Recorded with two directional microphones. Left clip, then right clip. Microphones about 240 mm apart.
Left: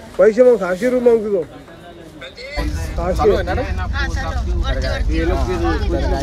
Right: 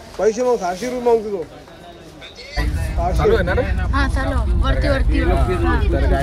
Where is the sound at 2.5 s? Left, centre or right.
Left.